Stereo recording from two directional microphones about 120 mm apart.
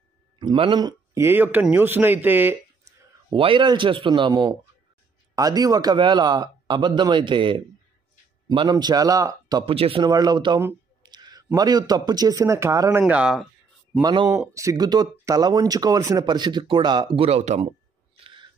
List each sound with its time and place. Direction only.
0.4 s speech: 40° right (ahead or behind)
1.1 s speech: 20° right (ahead or behind)
3.3 s speech: 45° right (ahead or behind)
9.7 s speech: 50° right (ahead or behind)
10.0 s speech: 35° right (ahead or behind)
11.0 s a sound: 35° right (ahead or behind)
11.5 s speech: 30° right (ahead or behind)
13.0 s speech: 5° right (ahead or behind)
14.0 s speech: 35° right (ahead or behind)
17.2 s speech: 60° right (ahead or behind)
18.1 s owl: 50° right (ahead or behind)